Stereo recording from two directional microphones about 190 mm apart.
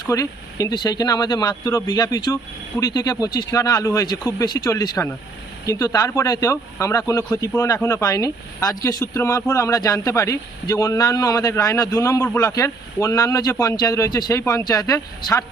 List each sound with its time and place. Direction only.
0.0 s speech: 20° left (ahead or behind)